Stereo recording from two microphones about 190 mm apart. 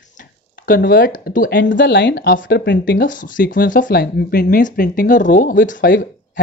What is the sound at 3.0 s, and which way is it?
Speech, 45° left (ahead or behind).